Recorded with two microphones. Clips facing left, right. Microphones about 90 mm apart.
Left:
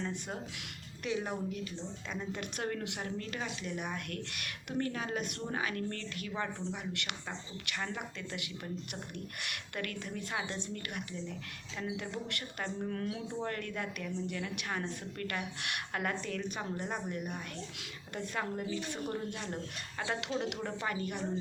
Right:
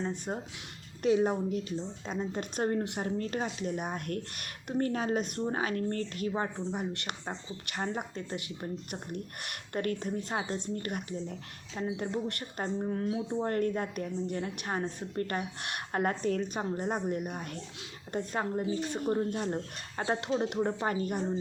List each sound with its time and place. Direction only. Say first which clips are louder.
0.0 s a woman's voice: right 4 dB; 30° right (ahead or behind)
12.9 s a woman's voice: right 6 dB; 20° right (ahead or behind); by 21.2 s 40° right (ahead or behind)